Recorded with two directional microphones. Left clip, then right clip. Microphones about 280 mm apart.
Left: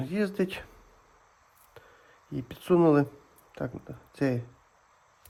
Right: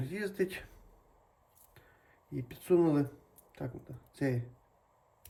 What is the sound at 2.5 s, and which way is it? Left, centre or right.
Speech, centre.